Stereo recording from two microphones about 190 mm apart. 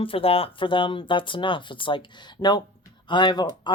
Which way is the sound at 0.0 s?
30° left (ahead or behind).